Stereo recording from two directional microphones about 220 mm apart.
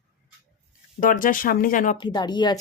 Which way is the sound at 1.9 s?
20° left (ahead or behind).